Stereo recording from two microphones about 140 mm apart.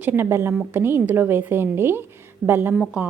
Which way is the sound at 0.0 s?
15° right (ahead or behind).